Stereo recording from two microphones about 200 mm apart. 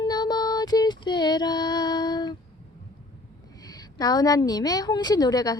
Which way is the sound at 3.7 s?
20° left (ahead or behind).